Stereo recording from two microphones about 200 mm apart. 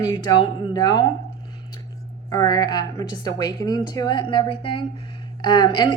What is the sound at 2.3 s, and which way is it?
A woman's voice, 20° left (ahead or behind).